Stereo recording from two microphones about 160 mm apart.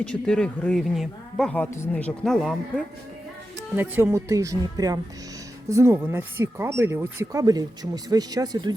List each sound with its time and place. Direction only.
0.0 s speech: 5° left (ahead or behind)
3.8 s speech: 15° right (ahead or behind)